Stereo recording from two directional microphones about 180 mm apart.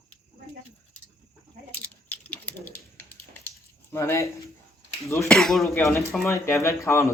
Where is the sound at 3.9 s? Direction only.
15° left (ahead or behind).